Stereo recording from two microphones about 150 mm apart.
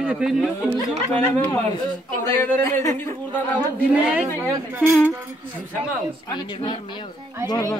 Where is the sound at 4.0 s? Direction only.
10° right (ahead or behind).